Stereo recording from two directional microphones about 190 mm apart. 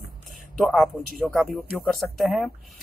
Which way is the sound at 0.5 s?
Centre (ahead or behind).